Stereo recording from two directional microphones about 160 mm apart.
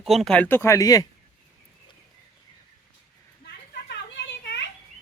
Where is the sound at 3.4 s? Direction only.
90° left.